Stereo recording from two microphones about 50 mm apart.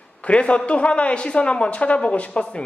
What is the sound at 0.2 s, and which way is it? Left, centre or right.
A man's voice, left.